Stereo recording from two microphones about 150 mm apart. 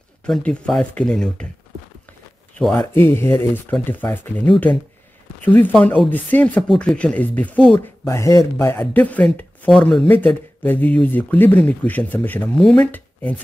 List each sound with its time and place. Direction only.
0.2 s speech: 5° left (ahead or behind)
2.9 s speech: 15° left (ahead or behind)
5.4 s speech: 10° left (ahead or behind)
8.1 s speech: 20° left (ahead or behind)